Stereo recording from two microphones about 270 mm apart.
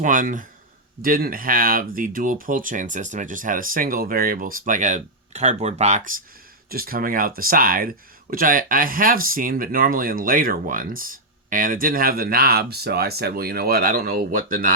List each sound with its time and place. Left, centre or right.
0.0 s speech: right